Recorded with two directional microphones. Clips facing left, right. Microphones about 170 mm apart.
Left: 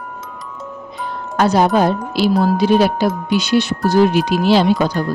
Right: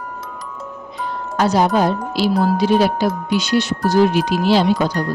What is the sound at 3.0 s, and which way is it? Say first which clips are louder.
Speech: left 2 dB; 60° left (ahead or behind).